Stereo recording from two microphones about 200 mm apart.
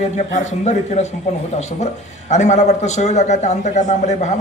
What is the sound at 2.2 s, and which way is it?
Speech, 35° left (ahead or behind).